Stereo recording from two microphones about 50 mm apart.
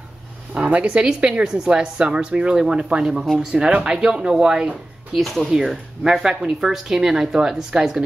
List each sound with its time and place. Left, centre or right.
0.6 s a woman's voice: right
5.2 s a woman's voice: centre